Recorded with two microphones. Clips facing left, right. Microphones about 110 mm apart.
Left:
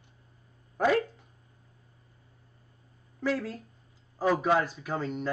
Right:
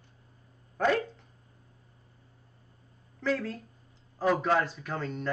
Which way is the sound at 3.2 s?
5° left (ahead or behind).